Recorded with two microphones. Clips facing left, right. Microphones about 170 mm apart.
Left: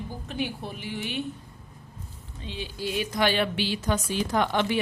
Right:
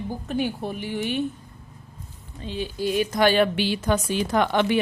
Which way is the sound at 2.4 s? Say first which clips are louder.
Right 6 dB; 45° right (ahead or behind).